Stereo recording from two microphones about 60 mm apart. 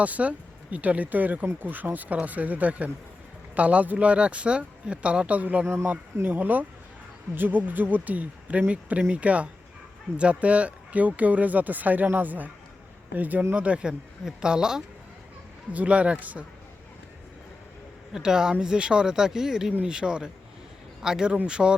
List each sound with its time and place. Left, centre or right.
0.0 s speech: right
15.7 s speech: right
18.1 s speech: centre